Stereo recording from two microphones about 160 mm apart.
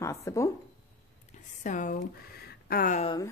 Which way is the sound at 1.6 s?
50° left (ahead or behind).